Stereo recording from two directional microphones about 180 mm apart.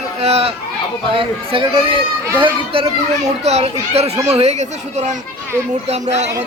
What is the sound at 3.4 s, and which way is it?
Speech, 35° right (ahead or behind).